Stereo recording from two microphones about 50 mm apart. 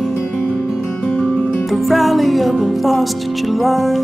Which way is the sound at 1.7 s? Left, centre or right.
Centre.